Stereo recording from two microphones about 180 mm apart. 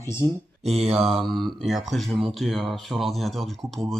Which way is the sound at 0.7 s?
35° right (ahead or behind).